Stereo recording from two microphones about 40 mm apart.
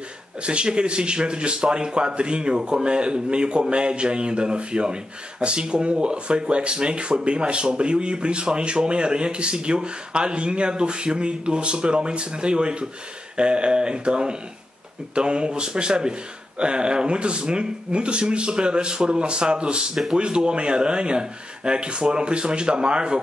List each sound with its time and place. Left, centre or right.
0.4 s speech: right